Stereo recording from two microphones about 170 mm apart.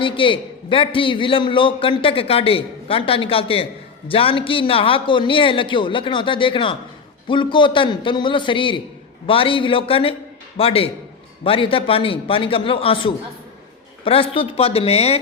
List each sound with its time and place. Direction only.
0.0 s a man's voice: 30° left (ahead or behind)